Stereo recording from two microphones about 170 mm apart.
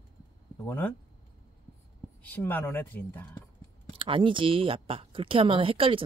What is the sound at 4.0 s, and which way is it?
Speech, 30° right (ahead or behind).